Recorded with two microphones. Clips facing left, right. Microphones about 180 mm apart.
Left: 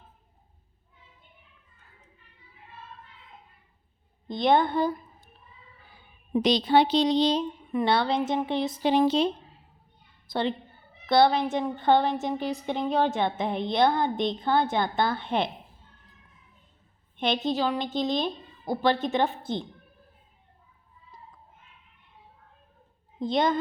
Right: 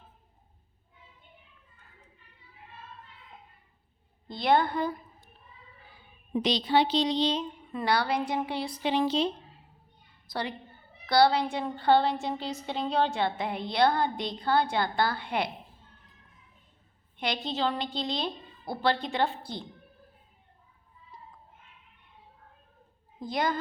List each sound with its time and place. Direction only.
4.3 s a woman's voice: 20° left (ahead or behind)
6.3 s a woman's voice: 45° left (ahead or behind)
7.7 s a woman's voice: 20° left (ahead or behind)
8.8 s a woman's voice: 45° left (ahead or behind)
10.2 s a woman's voice: 25° left (ahead or behind)
17.2 s a woman's voice: 20° left (ahead or behind)
23.2 s a woman's voice: 25° left (ahead or behind)